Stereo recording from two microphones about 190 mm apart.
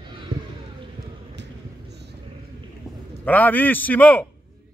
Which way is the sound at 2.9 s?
Centre (ahead or behind).